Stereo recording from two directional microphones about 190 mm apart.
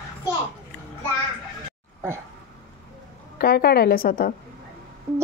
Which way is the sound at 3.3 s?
55° left (ahead or behind).